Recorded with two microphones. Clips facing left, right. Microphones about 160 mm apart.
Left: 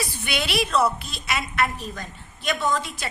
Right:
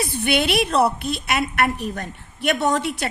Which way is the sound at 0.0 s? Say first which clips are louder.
Right 7 dB; 55° right (ahead or behind).